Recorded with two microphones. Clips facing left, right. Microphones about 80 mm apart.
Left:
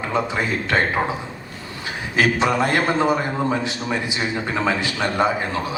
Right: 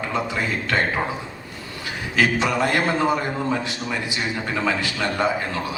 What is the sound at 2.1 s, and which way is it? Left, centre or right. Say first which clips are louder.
A man's voice: left 2 dB; left.